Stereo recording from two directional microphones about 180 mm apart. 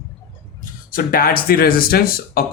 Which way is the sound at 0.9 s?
55° left (ahead or behind).